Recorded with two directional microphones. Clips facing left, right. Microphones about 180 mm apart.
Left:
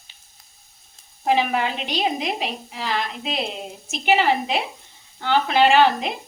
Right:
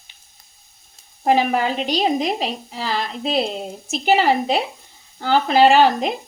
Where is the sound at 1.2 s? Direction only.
40° right (ahead or behind).